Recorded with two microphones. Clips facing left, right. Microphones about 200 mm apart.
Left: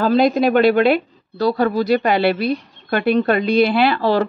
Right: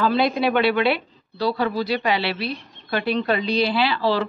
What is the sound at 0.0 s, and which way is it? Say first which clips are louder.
A woman's voice: left 5 dB; 45° left (ahead or behind).